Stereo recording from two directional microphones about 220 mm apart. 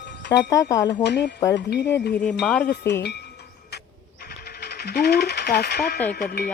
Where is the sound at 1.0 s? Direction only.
50° left (ahead or behind).